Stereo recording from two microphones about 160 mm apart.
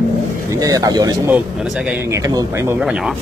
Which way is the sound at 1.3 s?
5° right (ahead or behind).